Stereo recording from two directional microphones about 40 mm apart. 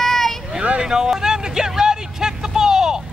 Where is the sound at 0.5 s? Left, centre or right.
Right.